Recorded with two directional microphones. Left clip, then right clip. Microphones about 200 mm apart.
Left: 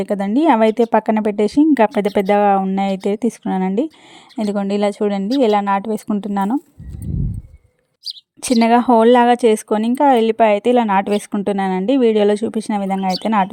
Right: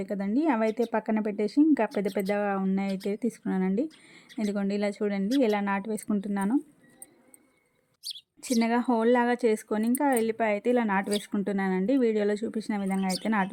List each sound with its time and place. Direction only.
0.0 s speech: 40° left (ahead or behind)
8.4 s speech: 50° left (ahead or behind)